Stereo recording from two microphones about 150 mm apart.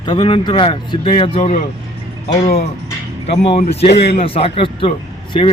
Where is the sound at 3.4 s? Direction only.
45° left (ahead or behind).